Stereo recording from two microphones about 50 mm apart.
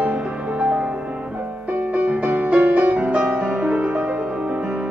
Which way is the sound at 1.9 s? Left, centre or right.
Right.